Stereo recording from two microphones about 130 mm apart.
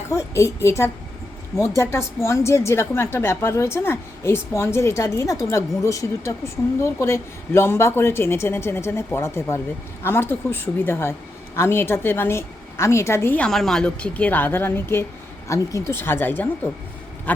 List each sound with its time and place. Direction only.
0.1 s a woman's voice: 20° left (ahead or behind)
13.5 s a woman's voice: centre (ahead or behind)